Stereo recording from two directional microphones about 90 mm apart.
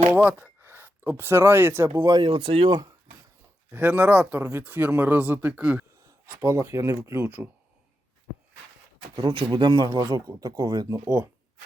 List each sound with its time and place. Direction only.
0.2 s speech: 20° right (ahead or behind)
2.2 s speech: 75° right (ahead or behind)
3.7 s speech: 20° right (ahead or behind)
6.1 s speech: 40° right (ahead or behind)
7.3 s speech: 20° right (ahead or behind)
9.2 s speech: 60° right (ahead or behind)
9.7 s speech: 45° right (ahead or behind)